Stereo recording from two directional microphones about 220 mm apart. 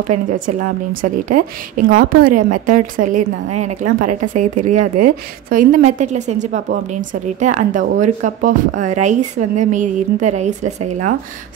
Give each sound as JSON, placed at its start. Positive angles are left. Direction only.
{"t": 0.5, "sound": "a woman's voice", "side_deg": -35}